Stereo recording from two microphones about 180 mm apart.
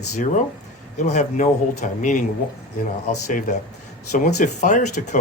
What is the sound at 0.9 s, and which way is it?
Speech, 40° left (ahead or behind).